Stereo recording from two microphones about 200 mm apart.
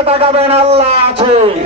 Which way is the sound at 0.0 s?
30° right (ahead or behind).